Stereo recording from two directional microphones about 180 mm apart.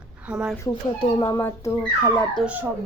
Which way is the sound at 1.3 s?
15° left (ahead or behind).